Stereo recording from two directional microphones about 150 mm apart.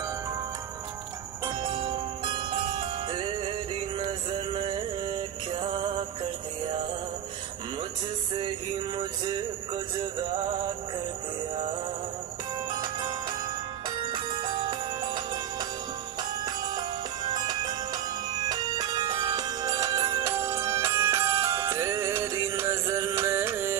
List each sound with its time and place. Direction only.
1.6 s jingle bell: 35° right (ahead or behind)
4.0 s music: 35° right (ahead or behind)
12.7 s jingle bell: 25° right (ahead or behind)
13.8 s music: 30° right (ahead or behind)